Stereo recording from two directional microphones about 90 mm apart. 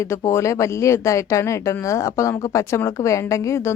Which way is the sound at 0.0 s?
30° left (ahead or behind).